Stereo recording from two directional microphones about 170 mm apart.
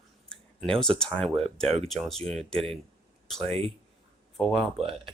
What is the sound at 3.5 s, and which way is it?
Speech, 35° right (ahead or behind).